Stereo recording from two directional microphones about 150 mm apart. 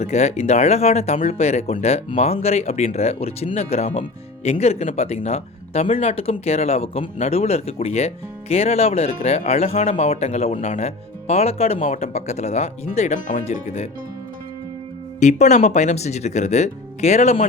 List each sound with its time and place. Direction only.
0.0 s speech: 45° left (ahead or behind)
15.2 s speech: 50° left (ahead or behind)